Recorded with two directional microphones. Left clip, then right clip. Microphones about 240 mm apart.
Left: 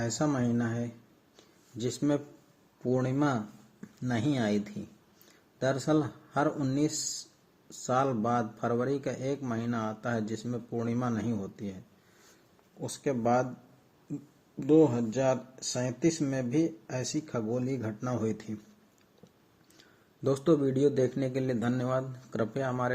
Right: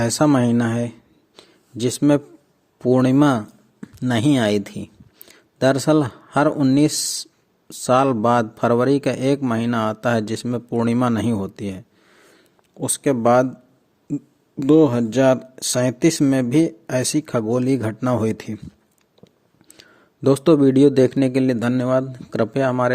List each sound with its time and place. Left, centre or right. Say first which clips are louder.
0.0 s a man's voice: right 13 dB; right
1.4 s a sound: right 12 dB; right
2.8 s a man's voice: right 13 dB; right
12.8 s speech: right 12 dB; right
14.6 s speech: right 9 dB; right
20.2 s a man's voice: right 12 dB; right